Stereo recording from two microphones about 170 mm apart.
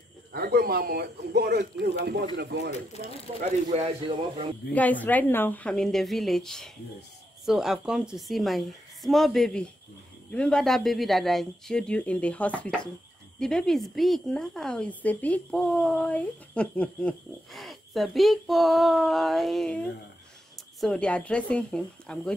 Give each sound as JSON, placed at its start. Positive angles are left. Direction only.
{"t": 0.3, "sound": "a man's voice", "side_deg": -65}
{"t": 3.7, "sound": "speech", "side_deg": -35}
{"t": 4.7, "sound": "speech", "side_deg": 10}